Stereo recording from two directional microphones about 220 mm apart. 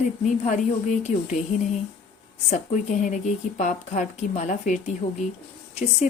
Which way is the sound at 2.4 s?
35° left (ahead or behind).